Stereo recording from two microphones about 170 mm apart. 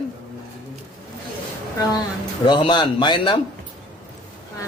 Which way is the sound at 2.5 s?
25° left (ahead or behind).